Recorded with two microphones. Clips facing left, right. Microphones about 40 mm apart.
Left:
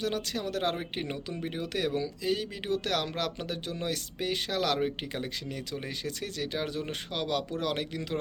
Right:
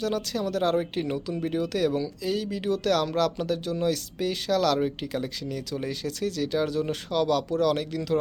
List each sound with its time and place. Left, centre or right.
0.0 s speech: left